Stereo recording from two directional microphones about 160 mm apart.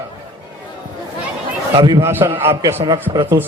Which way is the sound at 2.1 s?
15° right (ahead or behind).